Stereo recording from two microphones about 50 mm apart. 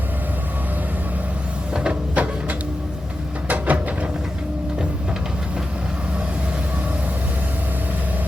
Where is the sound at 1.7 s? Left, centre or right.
Right.